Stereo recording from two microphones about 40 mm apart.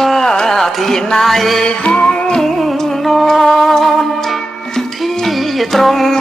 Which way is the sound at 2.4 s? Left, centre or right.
Centre.